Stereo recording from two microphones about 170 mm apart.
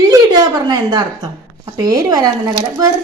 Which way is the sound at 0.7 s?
25° right (ahead or behind).